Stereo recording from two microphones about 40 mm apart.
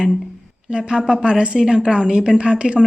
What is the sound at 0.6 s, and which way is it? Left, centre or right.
Speech, right.